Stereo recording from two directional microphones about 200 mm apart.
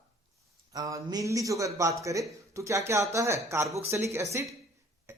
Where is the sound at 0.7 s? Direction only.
15° right (ahead or behind).